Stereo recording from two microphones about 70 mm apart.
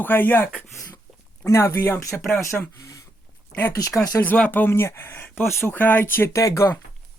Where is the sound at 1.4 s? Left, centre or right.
Left.